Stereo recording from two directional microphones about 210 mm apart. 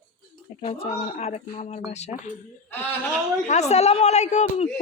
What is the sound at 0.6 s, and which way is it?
Speech, 30° left (ahead or behind).